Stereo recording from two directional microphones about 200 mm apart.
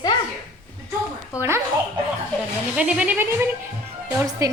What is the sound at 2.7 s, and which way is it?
Music, 5° right (ahead or behind).